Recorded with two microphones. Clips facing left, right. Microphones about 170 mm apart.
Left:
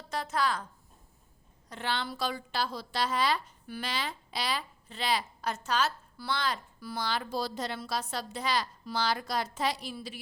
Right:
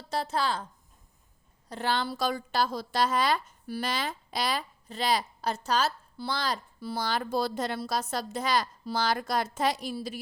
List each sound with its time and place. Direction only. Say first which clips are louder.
0.1 s a woman's voice: right 2 dB; 30° right (ahead or behind)
1.7 s a woman's voice: right 4 dB; 40° right (ahead or behind)